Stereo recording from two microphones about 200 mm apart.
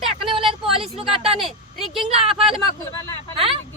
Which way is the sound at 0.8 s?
Centre (ahead or behind).